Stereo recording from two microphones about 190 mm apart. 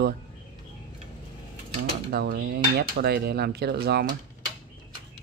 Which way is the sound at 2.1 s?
55° right (ahead or behind).